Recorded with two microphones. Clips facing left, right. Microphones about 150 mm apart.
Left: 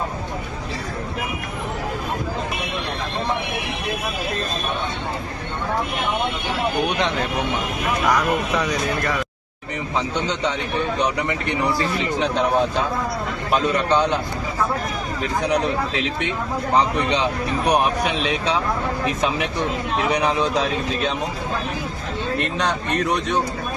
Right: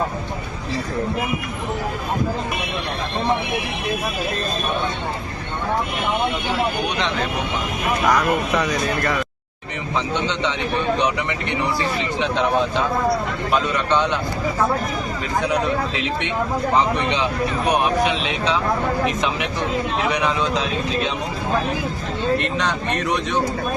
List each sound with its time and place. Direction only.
13.9 s speech: 35° left (ahead or behind)
16.7 s speech: 35° left (ahead or behind)
20.1 s speech: 35° left (ahead or behind)